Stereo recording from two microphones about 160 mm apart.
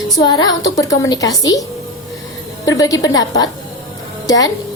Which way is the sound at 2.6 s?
20° left (ahead or behind).